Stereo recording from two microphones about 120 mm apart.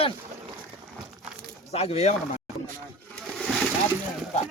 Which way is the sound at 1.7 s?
60° left (ahead or behind).